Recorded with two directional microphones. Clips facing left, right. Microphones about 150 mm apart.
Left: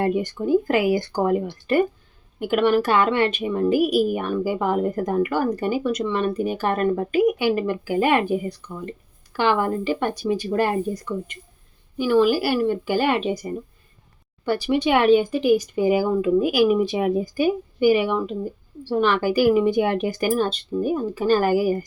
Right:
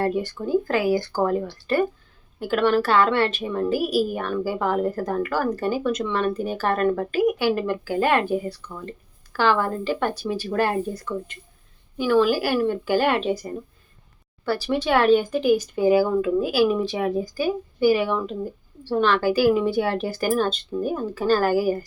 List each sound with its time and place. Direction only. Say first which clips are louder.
0.0 s speech: left 2 dB; 15° left (ahead or behind)